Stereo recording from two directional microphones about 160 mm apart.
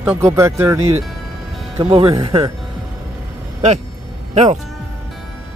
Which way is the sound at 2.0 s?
25° right (ahead or behind).